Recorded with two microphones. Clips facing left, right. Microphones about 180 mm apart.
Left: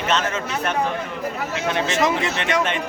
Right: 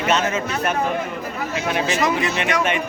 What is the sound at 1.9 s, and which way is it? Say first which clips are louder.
Speech: even; 25° left (ahead or behind).